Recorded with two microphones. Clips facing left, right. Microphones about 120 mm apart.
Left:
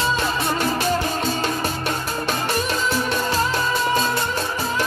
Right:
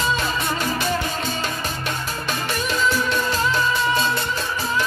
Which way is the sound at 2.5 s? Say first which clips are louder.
Even; 35° left (ahead or behind).